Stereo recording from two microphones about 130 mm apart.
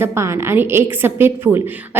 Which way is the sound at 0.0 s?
20° right (ahead or behind).